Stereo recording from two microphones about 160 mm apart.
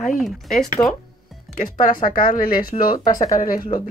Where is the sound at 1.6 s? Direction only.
60° left (ahead or behind).